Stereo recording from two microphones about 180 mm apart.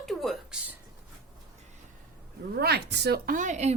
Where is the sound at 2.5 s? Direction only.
65° right (ahead or behind); by 3.7 s 40° right (ahead or behind).